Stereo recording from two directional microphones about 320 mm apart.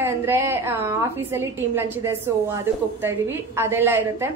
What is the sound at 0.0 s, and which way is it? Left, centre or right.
A woman's voice, centre.